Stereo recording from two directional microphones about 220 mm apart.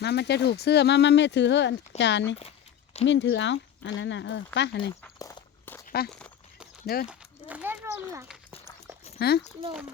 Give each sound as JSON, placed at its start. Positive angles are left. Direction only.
{"t": 0.0, "sound": "speech", "side_deg": 50}
{"t": 5.2, "sound": "walk", "side_deg": 10}
{"t": 5.8, "sound": "walk", "side_deg": 45}
{"t": 6.1, "sound": "a sound", "side_deg": 5}
{"t": 6.8, "sound": "speech", "side_deg": 45}
{"t": 7.1, "sound": "a sound", "side_deg": -5}
{"t": 9.1, "sound": "a child's voice", "side_deg": 45}